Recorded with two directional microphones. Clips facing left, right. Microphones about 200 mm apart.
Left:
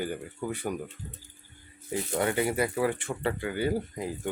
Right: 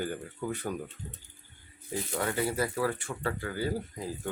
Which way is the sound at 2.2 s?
20° left (ahead or behind).